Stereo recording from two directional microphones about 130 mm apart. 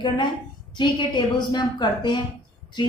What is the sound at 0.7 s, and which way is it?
A woman's voice, 35° left (ahead or behind).